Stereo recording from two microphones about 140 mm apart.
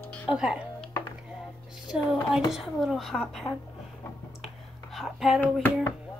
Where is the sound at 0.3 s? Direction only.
5° right (ahead or behind).